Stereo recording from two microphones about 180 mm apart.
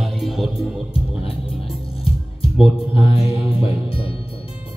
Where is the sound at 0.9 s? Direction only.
30° left (ahead or behind).